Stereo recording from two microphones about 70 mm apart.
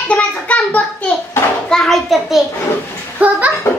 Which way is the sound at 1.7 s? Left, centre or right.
Centre.